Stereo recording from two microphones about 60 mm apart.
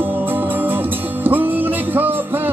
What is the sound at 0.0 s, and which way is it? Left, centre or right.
Music, right.